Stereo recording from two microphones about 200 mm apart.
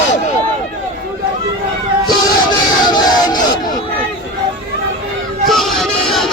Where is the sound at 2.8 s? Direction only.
20° left (ahead or behind).